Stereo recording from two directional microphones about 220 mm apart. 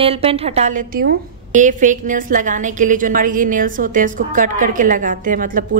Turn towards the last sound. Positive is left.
turn(degrees=-35)  # may be behind; listen again after turning